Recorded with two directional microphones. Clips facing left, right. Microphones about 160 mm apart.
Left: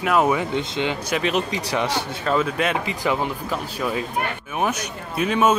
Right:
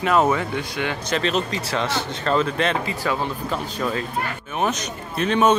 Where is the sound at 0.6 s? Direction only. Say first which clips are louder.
Left 2 dB; 20° left (ahead or behind).